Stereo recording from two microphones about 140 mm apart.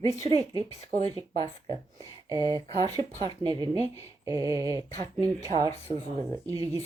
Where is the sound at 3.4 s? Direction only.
30° right (ahead or behind).